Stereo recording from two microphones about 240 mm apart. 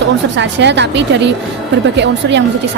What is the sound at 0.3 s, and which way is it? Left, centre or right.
Speech, right.